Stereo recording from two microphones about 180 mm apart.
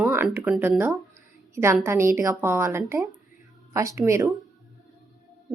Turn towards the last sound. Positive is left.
turn(degrees=-15)  # may be behind; listen again after turning